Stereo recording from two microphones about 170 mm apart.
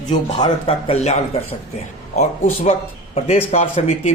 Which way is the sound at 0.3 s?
25° left (ahead or behind).